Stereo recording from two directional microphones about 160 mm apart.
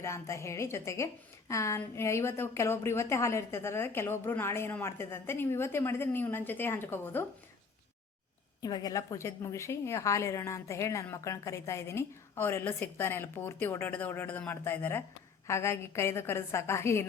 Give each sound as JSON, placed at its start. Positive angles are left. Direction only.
{"t": 0.0, "sound": "a woman's voice", "side_deg": 20}
{"t": 8.6, "sound": "a woman's voice", "side_deg": 25}